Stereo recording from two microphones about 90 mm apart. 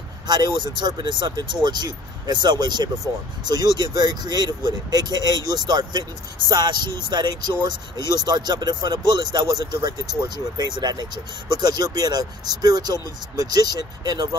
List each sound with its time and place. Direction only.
0.3 s speech: 55° right (ahead or behind)